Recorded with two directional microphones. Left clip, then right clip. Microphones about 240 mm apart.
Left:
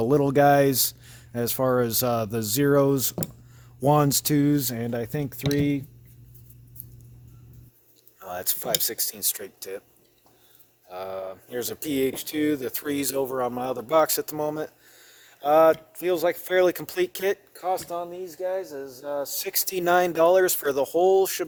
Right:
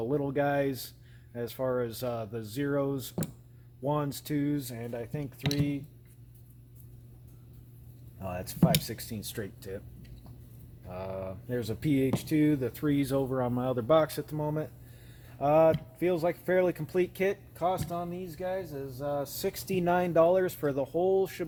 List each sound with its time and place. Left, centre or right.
0.0 s speech: left
5.4 s speech: centre
8.3 s speech: left
10.9 s speech: left